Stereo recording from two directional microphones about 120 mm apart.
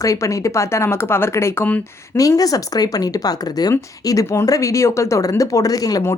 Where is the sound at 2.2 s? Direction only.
30° left (ahead or behind).